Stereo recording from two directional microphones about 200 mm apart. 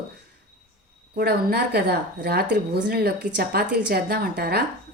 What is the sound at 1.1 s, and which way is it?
A woman's voice, 50° right (ahead or behind).